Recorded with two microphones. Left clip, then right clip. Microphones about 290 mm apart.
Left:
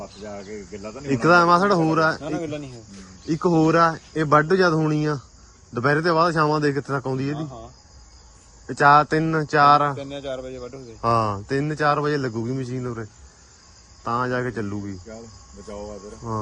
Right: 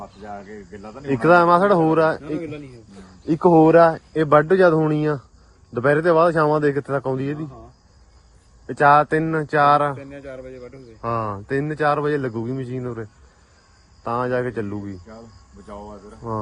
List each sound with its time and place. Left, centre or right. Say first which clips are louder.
0.3 s speech: even; centre
3.5 s speech: right 5 dB; centre
8.6 s speech: right 1 dB; centre
10.0 s speech: left 5 dB; centre
11.0 s speech: left 4 dB; centre
16.2 s speech: right 2 dB; centre